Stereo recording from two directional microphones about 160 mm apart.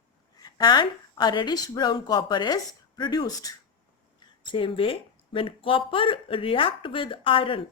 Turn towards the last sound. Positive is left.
turn(degrees=35)  # may be behind; listen again after turning